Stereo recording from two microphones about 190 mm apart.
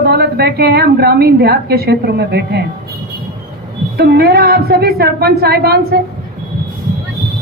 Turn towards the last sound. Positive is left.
turn(degrees=-55)  # may be behind; listen again after turning